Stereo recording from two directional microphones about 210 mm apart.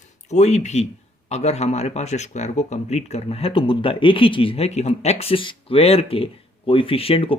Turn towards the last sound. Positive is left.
turn(degrees=25)  # may be behind; listen again after turning